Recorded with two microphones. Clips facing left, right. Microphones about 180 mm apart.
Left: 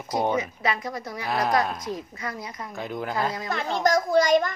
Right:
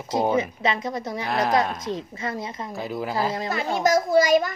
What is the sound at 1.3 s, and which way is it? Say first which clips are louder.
Speech: right 1 dB; centre (ahead or behind).